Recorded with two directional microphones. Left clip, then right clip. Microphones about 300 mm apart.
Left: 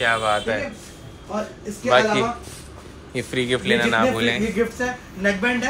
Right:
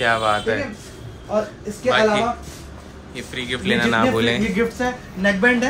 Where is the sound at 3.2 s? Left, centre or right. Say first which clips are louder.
Left 4 dB; centre.